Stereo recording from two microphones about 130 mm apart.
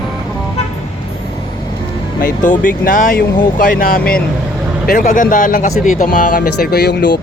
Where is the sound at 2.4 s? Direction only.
85° left.